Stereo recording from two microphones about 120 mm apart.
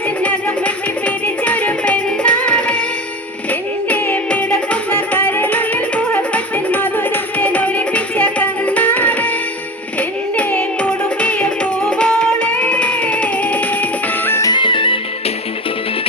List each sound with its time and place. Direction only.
0.2 s music: 10° left (ahead or behind)
14.5 s music: 45° left (ahead or behind)